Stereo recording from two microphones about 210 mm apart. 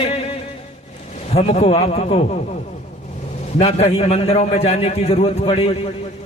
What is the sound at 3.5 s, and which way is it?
A man's voice, 30° left (ahead or behind).